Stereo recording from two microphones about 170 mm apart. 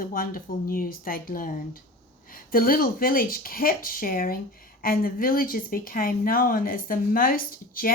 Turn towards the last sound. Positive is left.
turn(degrees=55)  # may be behind; listen again after turning